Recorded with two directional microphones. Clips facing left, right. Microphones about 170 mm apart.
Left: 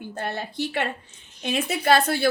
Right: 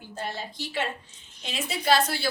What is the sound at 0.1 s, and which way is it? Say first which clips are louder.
A woman's voice: left 2 dB; 60° left (ahead or behind).